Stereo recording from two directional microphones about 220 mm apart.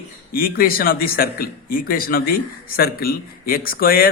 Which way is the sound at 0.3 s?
40° left (ahead or behind).